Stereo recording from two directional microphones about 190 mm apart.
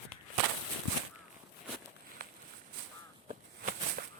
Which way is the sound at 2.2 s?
50° right (ahead or behind).